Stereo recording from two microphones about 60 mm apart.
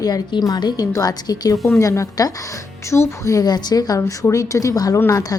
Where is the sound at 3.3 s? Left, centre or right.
Left.